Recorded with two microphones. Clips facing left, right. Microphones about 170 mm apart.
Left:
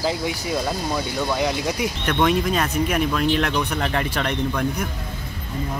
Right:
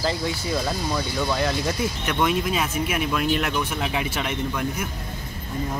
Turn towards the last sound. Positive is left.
turn(degrees=-5)  # may be behind; listen again after turning